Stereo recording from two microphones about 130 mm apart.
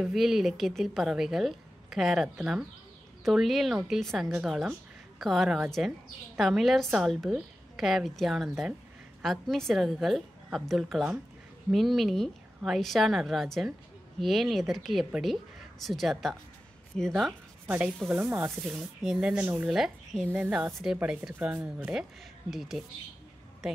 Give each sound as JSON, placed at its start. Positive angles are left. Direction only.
{"t": 0.0, "sound": "a woman's voice", "side_deg": 0}
{"t": 17.6, "sound": "a woman's voice", "side_deg": -10}
{"t": 18.5, "sound": "a woman's voice", "side_deg": -5}